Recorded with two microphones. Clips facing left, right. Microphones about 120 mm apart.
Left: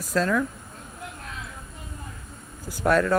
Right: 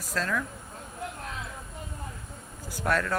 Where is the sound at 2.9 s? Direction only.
15° left (ahead or behind).